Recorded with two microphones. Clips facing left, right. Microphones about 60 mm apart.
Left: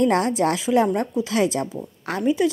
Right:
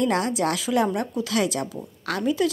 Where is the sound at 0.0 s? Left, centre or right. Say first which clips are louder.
Left 4 dB; left.